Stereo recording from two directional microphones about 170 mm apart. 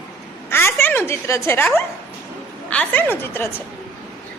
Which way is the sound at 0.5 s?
15° left (ahead or behind).